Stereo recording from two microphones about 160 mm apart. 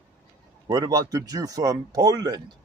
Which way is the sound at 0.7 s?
25° right (ahead or behind).